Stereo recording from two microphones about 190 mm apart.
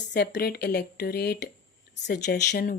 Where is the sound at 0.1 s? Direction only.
60° left (ahead or behind).